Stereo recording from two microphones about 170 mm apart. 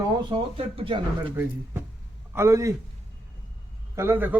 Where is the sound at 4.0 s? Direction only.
15° right (ahead or behind).